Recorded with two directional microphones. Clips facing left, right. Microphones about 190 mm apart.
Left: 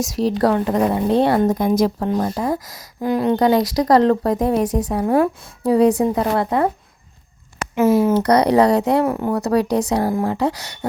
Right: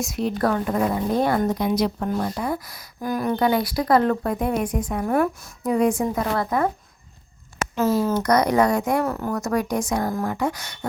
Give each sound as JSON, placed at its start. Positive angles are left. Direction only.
{"t": 0.0, "sound": "speech", "side_deg": 35}
{"t": 1.5, "sound": "speech", "side_deg": 50}
{"t": 2.6, "sound": "speech", "side_deg": 90}
{"t": 3.0, "sound": "speech", "side_deg": 25}
{"t": 3.3, "sound": "speech", "side_deg": 40}
{"t": 4.6, "sound": "a woman's voice", "side_deg": 80}
{"t": 4.9, "sound": "speech", "side_deg": 35}
{"t": 7.8, "sound": "speech", "side_deg": 25}